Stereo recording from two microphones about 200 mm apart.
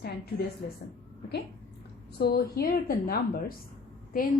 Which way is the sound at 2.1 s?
55° left (ahead or behind).